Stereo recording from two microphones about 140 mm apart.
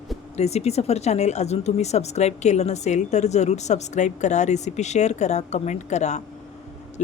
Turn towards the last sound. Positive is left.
turn(degrees=55)  # may be behind; listen again after turning